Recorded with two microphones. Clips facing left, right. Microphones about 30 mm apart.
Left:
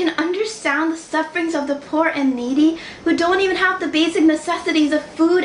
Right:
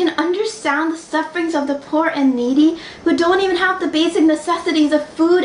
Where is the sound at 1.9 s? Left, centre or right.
Right.